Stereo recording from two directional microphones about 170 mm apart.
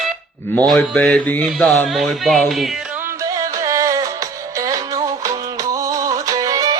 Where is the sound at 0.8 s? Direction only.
10° left (ahead or behind).